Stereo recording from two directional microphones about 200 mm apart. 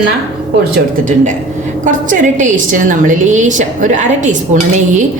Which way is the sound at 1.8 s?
40° right (ahead or behind).